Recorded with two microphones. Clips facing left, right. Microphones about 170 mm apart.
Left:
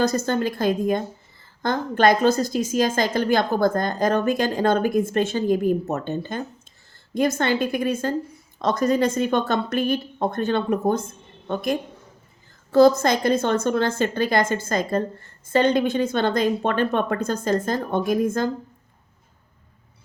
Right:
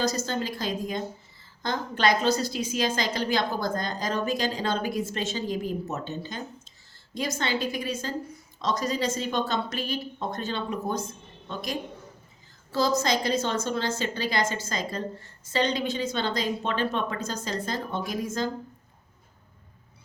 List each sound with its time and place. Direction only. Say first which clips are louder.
0.0 s a woman's voice: left 6 dB; 55° left (ahead or behind)